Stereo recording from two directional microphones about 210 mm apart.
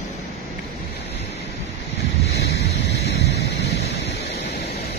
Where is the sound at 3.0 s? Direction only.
50° left (ahead or behind).